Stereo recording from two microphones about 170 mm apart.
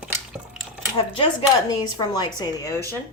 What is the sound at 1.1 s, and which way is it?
Speech, 30° left (ahead or behind).